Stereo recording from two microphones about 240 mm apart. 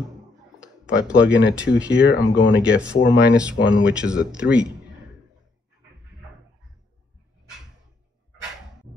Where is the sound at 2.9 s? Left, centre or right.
Left.